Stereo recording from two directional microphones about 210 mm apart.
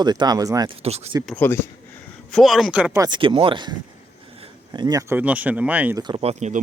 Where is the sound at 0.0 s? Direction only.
20° right (ahead or behind).